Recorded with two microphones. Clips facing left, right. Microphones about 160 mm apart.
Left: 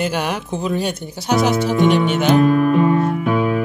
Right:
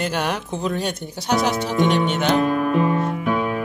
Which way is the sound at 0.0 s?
5° left (ahead or behind).